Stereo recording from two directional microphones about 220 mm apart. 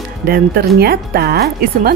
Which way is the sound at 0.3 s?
45° right (ahead or behind).